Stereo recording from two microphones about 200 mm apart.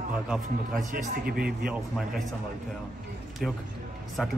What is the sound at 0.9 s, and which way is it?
Speech, 45° right (ahead or behind).